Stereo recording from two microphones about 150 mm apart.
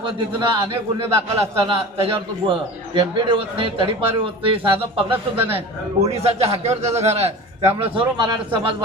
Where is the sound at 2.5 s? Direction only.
35° right (ahead or behind).